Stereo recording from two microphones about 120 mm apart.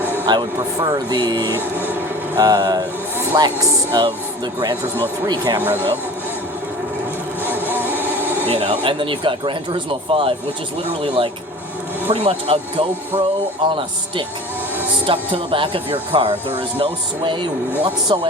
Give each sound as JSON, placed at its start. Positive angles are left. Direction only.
{"t": 0.3, "sound": "speech", "side_deg": -40}
{"t": 1.5, "sound": "vehicle", "side_deg": -20}
{"t": 2.4, "sound": "speech", "side_deg": -35}
{"t": 5.5, "sound": "speech", "side_deg": -15}
{"t": 7.4, "sound": "vehicle", "side_deg": -15}
{"t": 8.5, "sound": "speech", "side_deg": -50}